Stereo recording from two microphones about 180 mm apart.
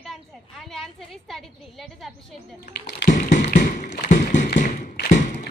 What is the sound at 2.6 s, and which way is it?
Speech, 60° left (ahead or behind).